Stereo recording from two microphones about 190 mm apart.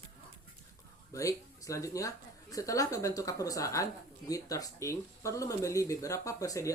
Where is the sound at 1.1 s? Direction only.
15° left (ahead or behind).